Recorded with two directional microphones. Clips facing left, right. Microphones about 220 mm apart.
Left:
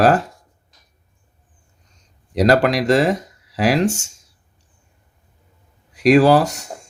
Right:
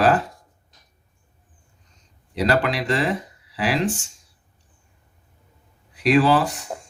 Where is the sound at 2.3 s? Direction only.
45° left (ahead or behind).